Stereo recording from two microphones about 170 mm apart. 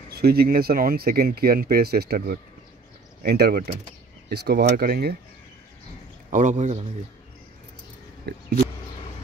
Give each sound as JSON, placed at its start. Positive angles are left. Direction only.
{"t": 0.1, "sound": "speech", "side_deg": -65}
{"t": 4.3, "sound": "speech", "side_deg": -70}
{"t": 6.3, "sound": "a man's voice", "side_deg": -45}
{"t": 8.3, "sound": "speech", "side_deg": -70}